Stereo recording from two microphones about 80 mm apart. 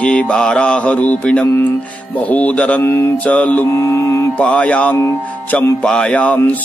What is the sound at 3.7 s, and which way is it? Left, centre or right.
Mantra, left.